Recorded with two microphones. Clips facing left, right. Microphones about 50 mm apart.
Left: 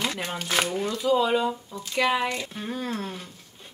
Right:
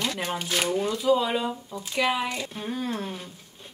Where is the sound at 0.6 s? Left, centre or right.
Left.